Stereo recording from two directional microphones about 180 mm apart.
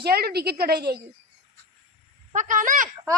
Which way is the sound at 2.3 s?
45° right (ahead or behind).